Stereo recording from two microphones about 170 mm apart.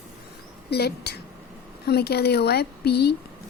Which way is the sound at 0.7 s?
70° left (ahead or behind).